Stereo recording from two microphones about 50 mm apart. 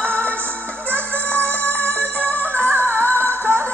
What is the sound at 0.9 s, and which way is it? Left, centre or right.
Music, left.